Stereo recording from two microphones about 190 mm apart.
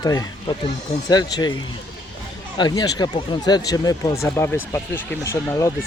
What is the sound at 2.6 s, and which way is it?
Speech, 20° left (ahead or behind).